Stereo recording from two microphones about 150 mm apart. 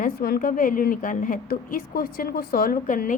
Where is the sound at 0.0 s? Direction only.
80° left.